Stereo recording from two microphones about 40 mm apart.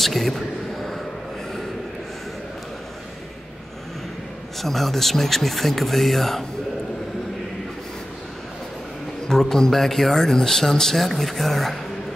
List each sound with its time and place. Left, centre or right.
0.0 s a sound: centre
4.6 s speech: centre
9.3 s speech: centre